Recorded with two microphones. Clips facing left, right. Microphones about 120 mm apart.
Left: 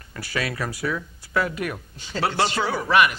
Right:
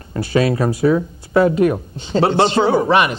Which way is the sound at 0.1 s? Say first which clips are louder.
Right 12 dB; 25° right (ahead or behind).